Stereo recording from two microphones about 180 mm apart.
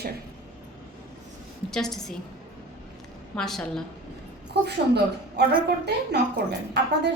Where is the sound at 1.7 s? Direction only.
5° left (ahead or behind).